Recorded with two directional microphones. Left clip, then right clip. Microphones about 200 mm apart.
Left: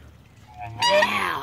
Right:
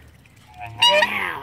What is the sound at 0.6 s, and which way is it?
Fowl, 5° left (ahead or behind).